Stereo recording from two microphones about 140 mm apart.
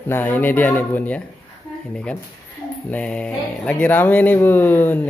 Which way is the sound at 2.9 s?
10° left (ahead or behind).